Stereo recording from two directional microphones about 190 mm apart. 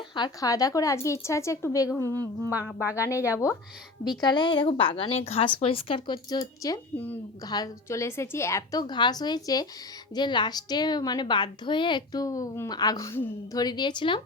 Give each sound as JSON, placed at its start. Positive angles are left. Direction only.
{"t": 0.1, "sound": "a woman's voice", "side_deg": 20}
{"t": 2.6, "sound": "speech", "side_deg": -5}
{"t": 4.2, "sound": "a woman's voice", "side_deg": 25}
{"t": 7.4, "sound": "a woman's voice", "side_deg": 20}